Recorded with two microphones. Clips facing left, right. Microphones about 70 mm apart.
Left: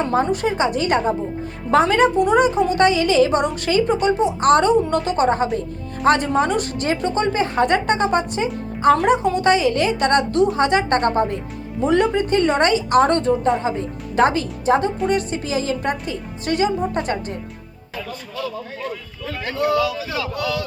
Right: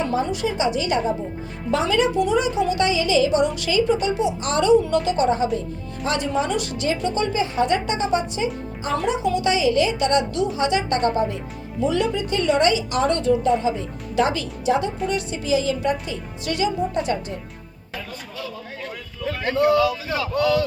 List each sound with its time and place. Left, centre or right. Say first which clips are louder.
0.1 s a woman's voice: left 4 dB; left
19.5 s speech: right 2 dB; right